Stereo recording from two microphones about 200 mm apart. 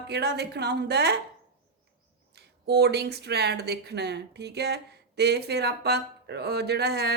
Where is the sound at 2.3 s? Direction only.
55° right (ahead or behind).